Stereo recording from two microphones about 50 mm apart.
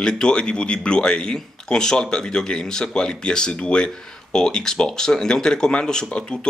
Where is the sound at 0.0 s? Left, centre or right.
Centre.